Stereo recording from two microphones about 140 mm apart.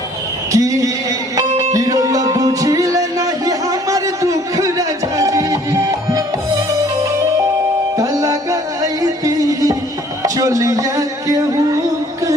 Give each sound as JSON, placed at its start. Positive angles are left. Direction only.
{"t": 0.5, "sound": "a man's voice", "side_deg": -25}
{"t": 1.7, "sound": "music", "side_deg": -25}
{"t": 7.9, "sound": "music", "side_deg": -25}
{"t": 10.2, "sound": "a sound", "side_deg": -25}